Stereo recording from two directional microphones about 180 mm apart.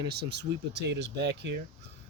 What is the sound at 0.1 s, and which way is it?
Speech, 65° right (ahead or behind).